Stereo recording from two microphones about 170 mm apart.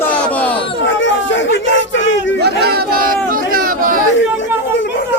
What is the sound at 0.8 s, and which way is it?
Chatter, 90° left.